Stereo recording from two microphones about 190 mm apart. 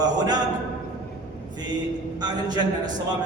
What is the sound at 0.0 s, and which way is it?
Speech, 20° right (ahead or behind).